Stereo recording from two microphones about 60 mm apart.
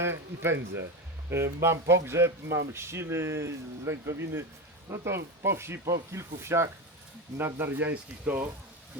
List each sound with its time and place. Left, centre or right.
0.0 s speech: right
7.3 s speech: right